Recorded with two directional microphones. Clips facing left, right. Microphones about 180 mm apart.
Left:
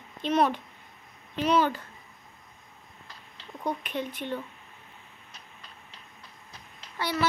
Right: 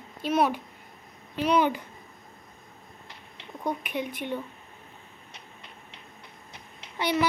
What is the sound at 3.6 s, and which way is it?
Speech, 10° right (ahead or behind).